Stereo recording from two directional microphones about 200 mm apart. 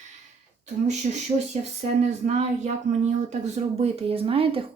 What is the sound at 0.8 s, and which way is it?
Speech, 35° right (ahead or behind).